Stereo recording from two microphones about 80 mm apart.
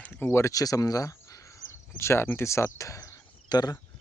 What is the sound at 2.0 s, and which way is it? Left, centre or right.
Speech, left.